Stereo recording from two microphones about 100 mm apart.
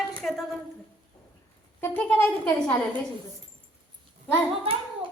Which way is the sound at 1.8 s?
20° left (ahead or behind).